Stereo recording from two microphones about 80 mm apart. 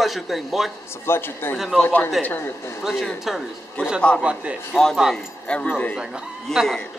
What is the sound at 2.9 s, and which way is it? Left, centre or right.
Speech, centre.